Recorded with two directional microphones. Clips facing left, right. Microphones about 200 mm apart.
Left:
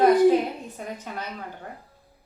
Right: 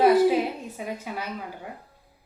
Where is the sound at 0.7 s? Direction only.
10° right (ahead or behind).